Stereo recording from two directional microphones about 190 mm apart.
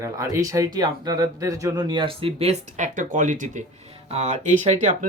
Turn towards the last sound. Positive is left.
turn(degrees=-40)  # may be behind; listen again after turning